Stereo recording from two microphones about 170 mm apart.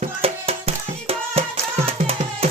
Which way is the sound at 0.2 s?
35° right (ahead or behind).